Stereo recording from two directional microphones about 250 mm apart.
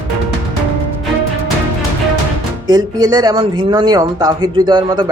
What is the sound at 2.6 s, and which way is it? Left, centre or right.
Speech, centre.